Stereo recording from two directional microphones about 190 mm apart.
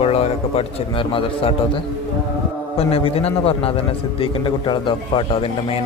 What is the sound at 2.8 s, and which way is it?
A man's voice, 30° left (ahead or behind).